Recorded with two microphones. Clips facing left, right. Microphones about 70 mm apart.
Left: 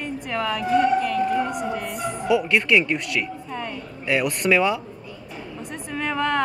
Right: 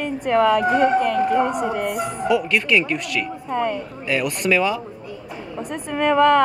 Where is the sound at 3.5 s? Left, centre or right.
Right.